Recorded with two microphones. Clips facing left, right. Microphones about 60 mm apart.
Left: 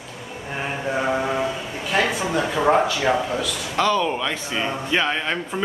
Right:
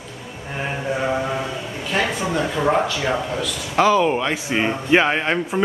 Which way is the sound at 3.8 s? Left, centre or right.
Centre.